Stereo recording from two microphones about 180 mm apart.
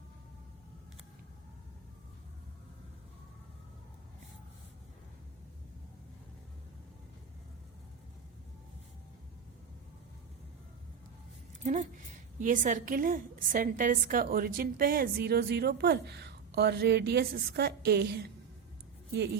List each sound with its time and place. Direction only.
11.6 s a woman's voice: 40° right (ahead or behind); by 19.4 s 65° right (ahead or behind)